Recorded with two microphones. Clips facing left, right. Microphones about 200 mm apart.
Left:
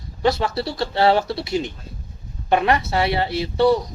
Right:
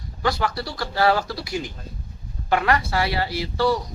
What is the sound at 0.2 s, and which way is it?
Speech, 25° left (ahead or behind).